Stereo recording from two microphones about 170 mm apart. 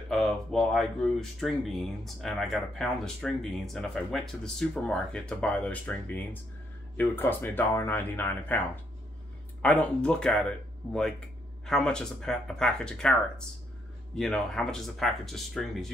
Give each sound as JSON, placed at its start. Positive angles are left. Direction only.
{"t": 0.1, "sound": "speech", "side_deg": 0}
{"t": 14.1, "sound": "speech", "side_deg": 5}